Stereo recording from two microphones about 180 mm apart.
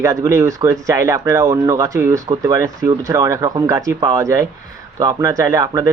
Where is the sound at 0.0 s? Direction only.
20° right (ahead or behind).